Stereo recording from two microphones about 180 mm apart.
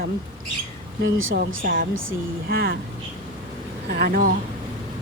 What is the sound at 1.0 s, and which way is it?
Speech, 90° right.